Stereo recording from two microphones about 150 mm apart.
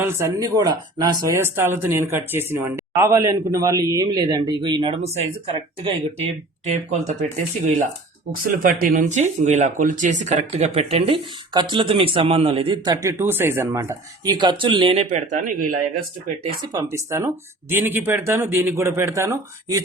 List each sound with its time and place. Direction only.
0.0 s speech: 20° right (ahead or behind); by 5.9 s 45° right (ahead or behind)
6.7 s speech: 55° right (ahead or behind)
8.3 s speech: 70° right (ahead or behind); by 15.0 s 35° right (ahead or behind)
15.1 s speech: 65° right (ahead or behind)
16.6 s speech: 20° right (ahead or behind)